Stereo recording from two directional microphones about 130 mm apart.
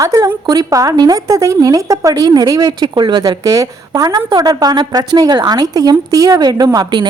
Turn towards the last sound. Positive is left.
turn(degrees=-35)  # may be behind; listen again after turning